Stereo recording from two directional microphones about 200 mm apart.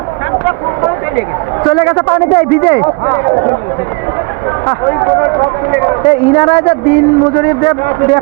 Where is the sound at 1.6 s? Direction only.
20° left (ahead or behind).